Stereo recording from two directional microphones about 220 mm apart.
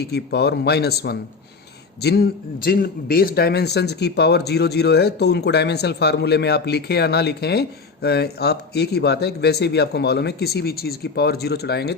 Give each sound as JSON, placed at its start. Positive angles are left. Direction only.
{"t": 0.0, "sound": "a man's voice", "side_deg": 50}